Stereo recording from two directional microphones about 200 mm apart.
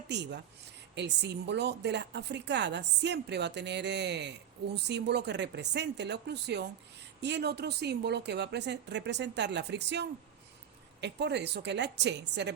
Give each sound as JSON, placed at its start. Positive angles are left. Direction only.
{"t": 0.1, "sound": "a woman's voice", "side_deg": -60}